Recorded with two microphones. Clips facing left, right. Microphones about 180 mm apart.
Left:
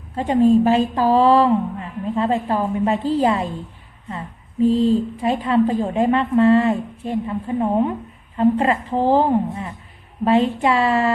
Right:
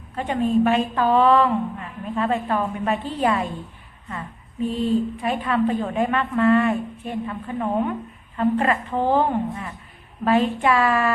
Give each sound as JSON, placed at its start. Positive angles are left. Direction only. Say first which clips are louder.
{"t": 0.2, "sound": "a woman's voice", "louder": "left 5 dB", "side_deg": 25}
{"t": 4.6, "sound": "a woman's voice", "louder": "left 6 dB", "side_deg": 30}